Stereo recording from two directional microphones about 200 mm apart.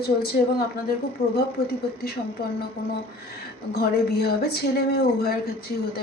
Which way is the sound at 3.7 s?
50° left (ahead or behind).